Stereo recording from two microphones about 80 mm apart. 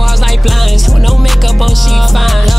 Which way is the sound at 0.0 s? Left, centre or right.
Centre.